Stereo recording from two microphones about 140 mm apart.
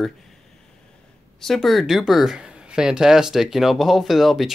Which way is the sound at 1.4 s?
Centre (ahead or behind).